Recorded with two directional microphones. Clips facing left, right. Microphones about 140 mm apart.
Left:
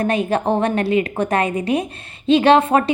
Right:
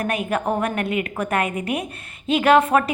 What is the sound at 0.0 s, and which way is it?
A woman's voice, 30° left (ahead or behind).